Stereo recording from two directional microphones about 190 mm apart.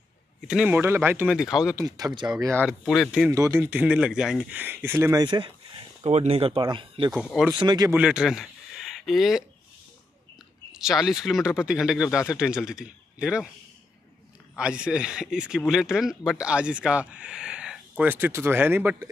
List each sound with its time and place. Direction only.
0.5 s speech: 5° right (ahead or behind)
1.8 s speech: 20° right (ahead or behind)
2.8 s speech: centre (ahead or behind)
3.3 s speech: 15° right (ahead or behind)
7.2 s speech: centre (ahead or behind)
7.5 s speech: 20° right (ahead or behind)
7.9 s speech: 5° right (ahead or behind)
10.7 s speech: 5° right (ahead or behind)
14.6 s speech: 5° right (ahead or behind)